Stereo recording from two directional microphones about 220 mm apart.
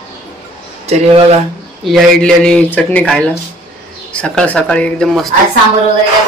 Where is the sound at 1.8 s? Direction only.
Centre (ahead or behind).